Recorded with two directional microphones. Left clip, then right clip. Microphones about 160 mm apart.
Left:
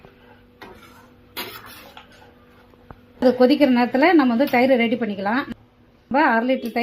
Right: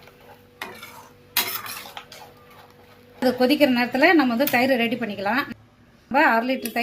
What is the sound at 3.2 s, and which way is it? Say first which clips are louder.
A woman's voice: left 3 dB; 15° left (ahead or behind).